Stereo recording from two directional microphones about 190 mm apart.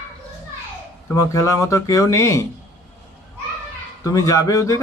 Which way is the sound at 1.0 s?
15° left (ahead or behind).